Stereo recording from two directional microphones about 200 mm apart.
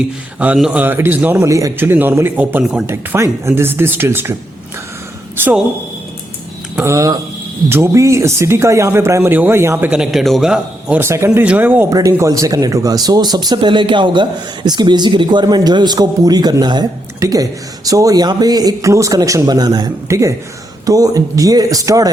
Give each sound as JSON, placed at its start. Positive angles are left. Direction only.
{"t": 0.3, "sound": "speech", "side_deg": -5}
{"t": 5.4, "sound": "speech", "side_deg": -10}
{"t": 6.7, "sound": "speech", "side_deg": -15}